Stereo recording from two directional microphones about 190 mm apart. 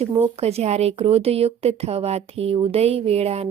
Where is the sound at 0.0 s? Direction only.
35° right (ahead or behind).